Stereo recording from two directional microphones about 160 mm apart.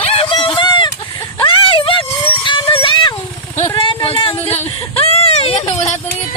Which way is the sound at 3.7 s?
35° left (ahead or behind).